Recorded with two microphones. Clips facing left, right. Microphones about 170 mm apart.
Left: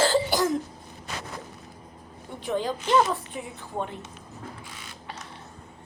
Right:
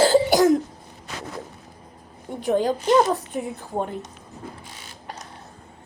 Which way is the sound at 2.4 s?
45° right (ahead or behind).